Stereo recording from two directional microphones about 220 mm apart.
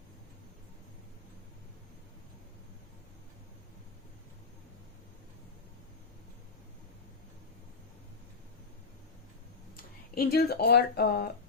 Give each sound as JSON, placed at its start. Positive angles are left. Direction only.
{"t": 9.7, "sound": "speech", "side_deg": 45}